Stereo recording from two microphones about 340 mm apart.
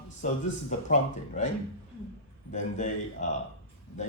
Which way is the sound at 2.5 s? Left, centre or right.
Left.